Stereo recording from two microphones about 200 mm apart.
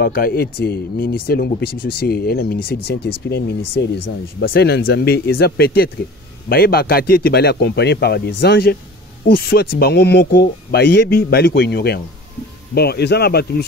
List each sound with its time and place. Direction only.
0.0 s speech: 50° left (ahead or behind)